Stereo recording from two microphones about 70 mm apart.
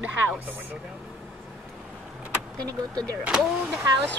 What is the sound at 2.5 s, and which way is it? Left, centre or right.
Speech, right.